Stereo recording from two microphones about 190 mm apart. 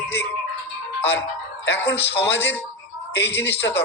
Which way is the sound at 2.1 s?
10° left (ahead or behind).